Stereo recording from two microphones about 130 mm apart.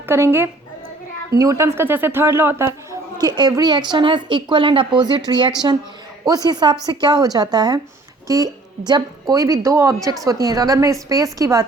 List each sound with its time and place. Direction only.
0.0 s a woman's voice: 20° right (ahead or behind)